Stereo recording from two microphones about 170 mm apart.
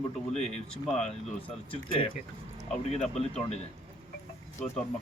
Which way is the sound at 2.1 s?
45° left (ahead or behind).